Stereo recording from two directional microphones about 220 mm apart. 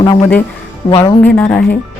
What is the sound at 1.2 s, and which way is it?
Speech, 10° left (ahead or behind).